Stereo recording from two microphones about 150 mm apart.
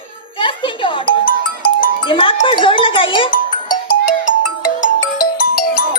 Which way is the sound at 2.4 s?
35° left (ahead or behind).